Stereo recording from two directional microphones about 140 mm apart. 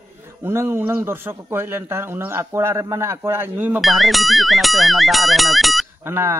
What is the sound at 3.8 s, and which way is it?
Speech, centre (ahead or behind).